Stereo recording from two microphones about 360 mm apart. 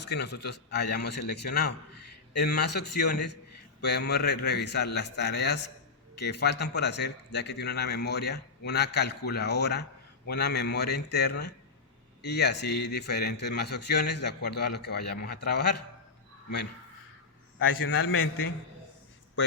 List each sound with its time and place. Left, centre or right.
0.0 s a man's voice: left
17.6 s a man's voice: left